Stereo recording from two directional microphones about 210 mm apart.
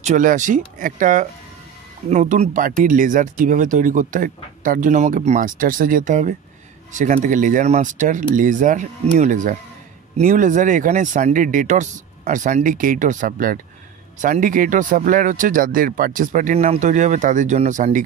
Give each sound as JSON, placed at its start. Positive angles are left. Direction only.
{"t": 0.0, "sound": "speech", "side_deg": -35}